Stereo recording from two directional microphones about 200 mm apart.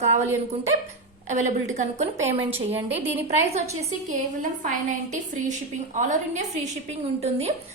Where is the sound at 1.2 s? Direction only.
40° right (ahead or behind).